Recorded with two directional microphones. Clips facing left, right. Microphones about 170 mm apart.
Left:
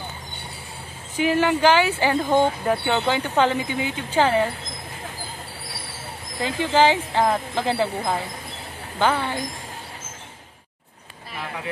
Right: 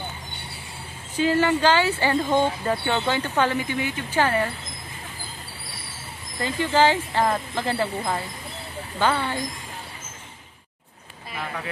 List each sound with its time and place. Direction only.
1.1 s speech: 15° left (ahead or behind)
6.4 s speech: 15° left (ahead or behind)